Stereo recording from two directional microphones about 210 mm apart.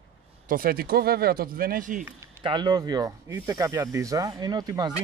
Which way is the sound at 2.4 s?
20° right (ahead or behind).